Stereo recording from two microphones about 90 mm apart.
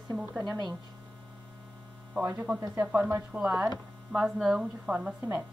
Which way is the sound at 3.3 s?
15° right (ahead or behind).